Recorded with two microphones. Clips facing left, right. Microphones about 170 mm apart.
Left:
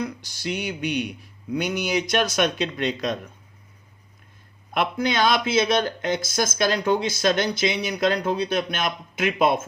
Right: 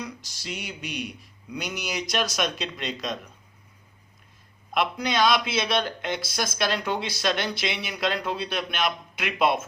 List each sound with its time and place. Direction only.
0.0 s speech: 60° left (ahead or behind)
4.7 s speech: 50° left (ahead or behind)